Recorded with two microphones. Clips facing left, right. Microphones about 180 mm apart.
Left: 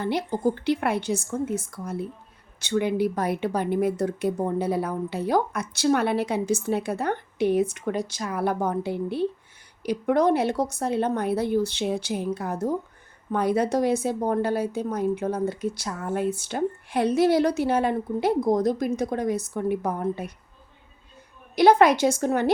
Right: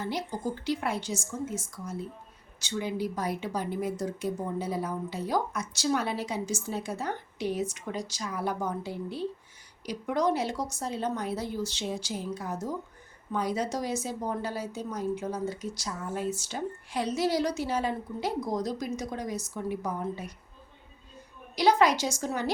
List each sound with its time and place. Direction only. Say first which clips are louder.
0.0 s a woman's voice: left 8 dB; 60° left (ahead or behind)
21.5 s a woman's voice: left 6 dB; 55° left (ahead or behind)